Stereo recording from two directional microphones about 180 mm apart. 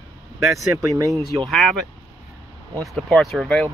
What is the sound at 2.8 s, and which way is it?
Speech, 5° left (ahead or behind).